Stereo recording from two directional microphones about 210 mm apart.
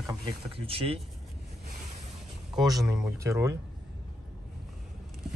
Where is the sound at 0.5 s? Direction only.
25° right (ahead or behind).